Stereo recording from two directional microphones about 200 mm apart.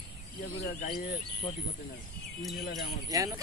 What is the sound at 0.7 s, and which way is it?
Speech, 50° left (ahead or behind).